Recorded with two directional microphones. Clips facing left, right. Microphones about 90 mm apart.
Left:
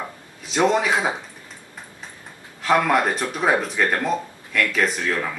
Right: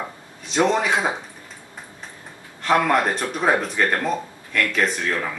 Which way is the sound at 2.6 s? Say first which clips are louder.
Even; centre (ahead or behind).